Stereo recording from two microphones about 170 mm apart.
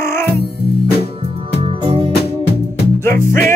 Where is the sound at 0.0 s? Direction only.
15° left (ahead or behind).